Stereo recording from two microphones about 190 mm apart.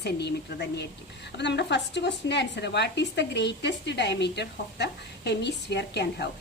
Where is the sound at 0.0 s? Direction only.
60° left (ahead or behind).